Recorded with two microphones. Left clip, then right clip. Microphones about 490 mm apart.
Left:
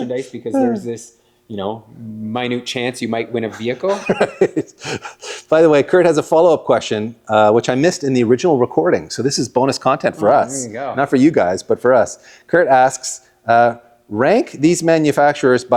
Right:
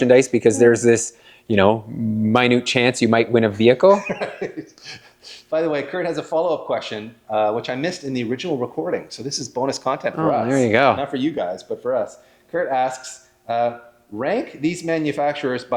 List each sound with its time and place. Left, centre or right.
0.0 s speech: right
2.3 s speech: centre
4.0 s speech: left
10.7 s speech: right
11.0 s speech: left